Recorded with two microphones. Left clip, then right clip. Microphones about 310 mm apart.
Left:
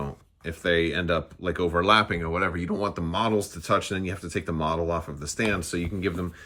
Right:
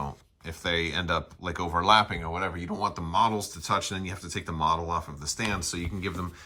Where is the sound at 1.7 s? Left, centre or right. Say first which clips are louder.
Even; centre.